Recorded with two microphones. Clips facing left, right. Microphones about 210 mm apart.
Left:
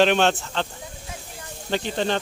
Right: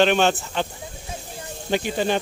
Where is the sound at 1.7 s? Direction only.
10° right (ahead or behind).